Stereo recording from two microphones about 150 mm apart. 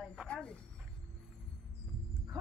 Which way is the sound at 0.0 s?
5° left (ahead or behind).